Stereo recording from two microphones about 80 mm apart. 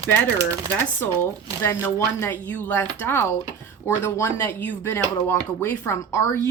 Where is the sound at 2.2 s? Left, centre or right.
Left.